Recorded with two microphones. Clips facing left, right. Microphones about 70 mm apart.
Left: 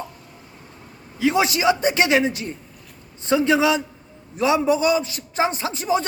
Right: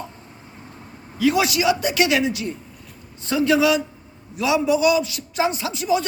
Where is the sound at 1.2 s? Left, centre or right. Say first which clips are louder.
Even; left.